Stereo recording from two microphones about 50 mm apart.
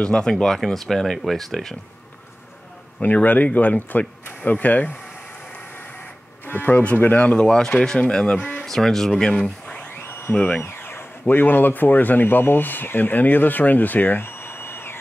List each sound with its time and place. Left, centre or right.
0.0 s speech: centre
3.0 s speech: left
6.4 s speech: left
7.0 s speech: left
7.3 s speech: centre
8.4 s cattle: left
8.6 s speech: centre
9.4 s a sound: left
10.0 s a sound: left
10.3 s speech: left
10.6 s speech: left
14.2 s a sound: left